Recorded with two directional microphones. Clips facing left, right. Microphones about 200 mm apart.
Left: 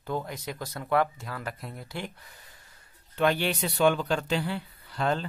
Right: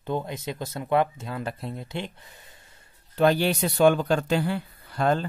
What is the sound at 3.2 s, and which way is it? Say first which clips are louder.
Speech: right 5 dB; 40° right (ahead or behind).